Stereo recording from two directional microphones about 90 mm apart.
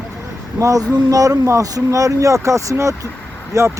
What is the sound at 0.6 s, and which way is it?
Speech, 40° right (ahead or behind).